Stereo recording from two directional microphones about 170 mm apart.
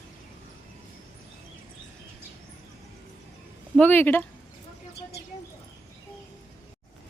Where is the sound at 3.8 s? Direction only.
10° left (ahead or behind).